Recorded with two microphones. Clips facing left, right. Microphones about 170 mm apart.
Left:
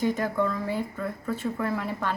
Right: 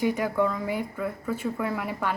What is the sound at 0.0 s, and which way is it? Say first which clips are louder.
Speech: right 1 dB; 10° right (ahead or behind).